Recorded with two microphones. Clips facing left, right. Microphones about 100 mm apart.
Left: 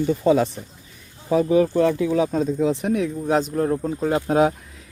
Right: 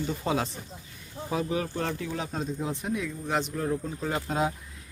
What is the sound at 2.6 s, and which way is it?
Speech, 65° left (ahead or behind).